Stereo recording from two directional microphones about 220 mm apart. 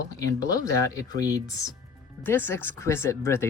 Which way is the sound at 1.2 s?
15° left (ahead or behind).